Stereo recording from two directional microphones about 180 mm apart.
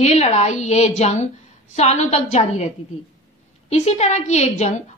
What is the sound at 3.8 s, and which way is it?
A woman's voice, 40° left (ahead or behind).